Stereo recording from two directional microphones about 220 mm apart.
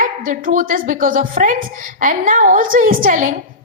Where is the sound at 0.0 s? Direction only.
40° right (ahead or behind).